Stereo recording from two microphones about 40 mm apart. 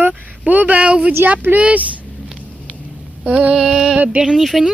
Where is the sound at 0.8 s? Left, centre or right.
Right.